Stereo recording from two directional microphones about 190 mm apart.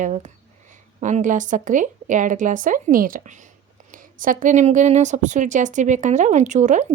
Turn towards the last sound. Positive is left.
turn(degrees=-40)  # may be behind; listen again after turning